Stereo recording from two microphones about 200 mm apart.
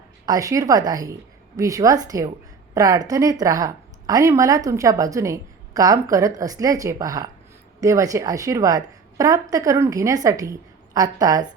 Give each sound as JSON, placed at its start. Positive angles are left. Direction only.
{"t": 0.3, "sound": "a woman's voice", "side_deg": -15}